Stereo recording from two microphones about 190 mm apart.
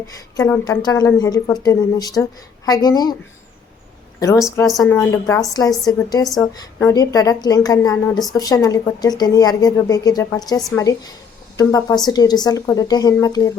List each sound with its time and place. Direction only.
0.3 s a woman's voice: 20° left (ahead or behind)
4.4 s speech: 15° left (ahead or behind)
4.7 s a woman's voice: centre (ahead or behind)
5.1 s a woman's voice: 15° left (ahead or behind)